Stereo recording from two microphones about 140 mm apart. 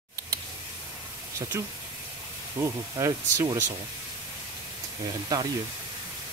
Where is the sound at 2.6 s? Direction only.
20° right (ahead or behind).